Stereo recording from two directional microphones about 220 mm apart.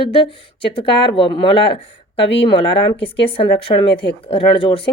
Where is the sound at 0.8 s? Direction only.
25° left (ahead or behind).